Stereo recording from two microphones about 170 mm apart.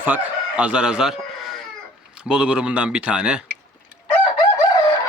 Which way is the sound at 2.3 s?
5° right (ahead or behind).